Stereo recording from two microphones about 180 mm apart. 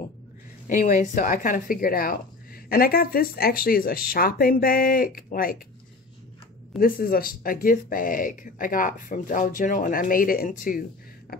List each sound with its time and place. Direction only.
0.7 s speech: 50° left (ahead or behind)
6.8 s speech: 55° left (ahead or behind)